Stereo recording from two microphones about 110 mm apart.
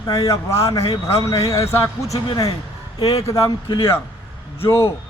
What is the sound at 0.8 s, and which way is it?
Speech, 55° left (ahead or behind).